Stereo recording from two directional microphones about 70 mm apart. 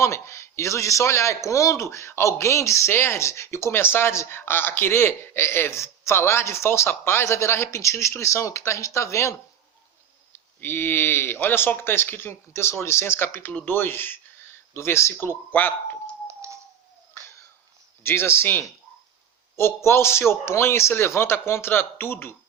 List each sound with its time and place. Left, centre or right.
0.0 s a man's voice: left
10.3 s a man's voice: left
16.2 s a sound: right
18.0 s a man's voice: left